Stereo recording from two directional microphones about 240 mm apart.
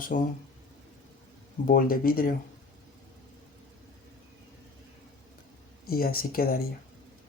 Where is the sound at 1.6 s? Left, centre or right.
Left.